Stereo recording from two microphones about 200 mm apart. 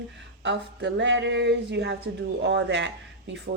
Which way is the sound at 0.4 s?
60° right (ahead or behind).